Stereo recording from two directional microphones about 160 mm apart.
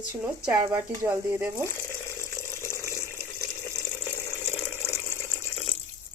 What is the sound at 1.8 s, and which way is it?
Water, 15° left (ahead or behind).